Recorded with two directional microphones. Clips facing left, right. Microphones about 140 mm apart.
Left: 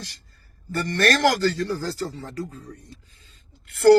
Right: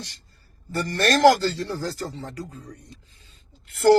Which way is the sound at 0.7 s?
20° right (ahead or behind).